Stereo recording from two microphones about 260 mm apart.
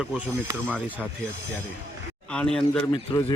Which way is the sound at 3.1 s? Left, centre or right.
Centre.